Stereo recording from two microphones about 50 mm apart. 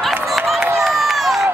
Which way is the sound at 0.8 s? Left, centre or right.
Centre.